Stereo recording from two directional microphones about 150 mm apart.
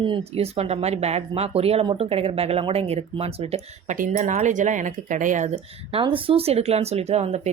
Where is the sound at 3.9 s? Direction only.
65° right (ahead or behind).